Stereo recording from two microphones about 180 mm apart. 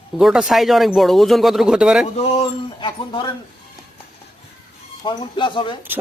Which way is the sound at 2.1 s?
30° left (ahead or behind).